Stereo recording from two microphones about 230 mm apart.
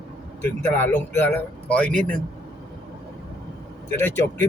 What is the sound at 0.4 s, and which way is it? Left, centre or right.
Speech, centre.